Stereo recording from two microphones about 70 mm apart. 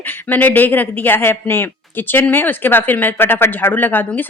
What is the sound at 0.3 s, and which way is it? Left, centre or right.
A woman's voice, left.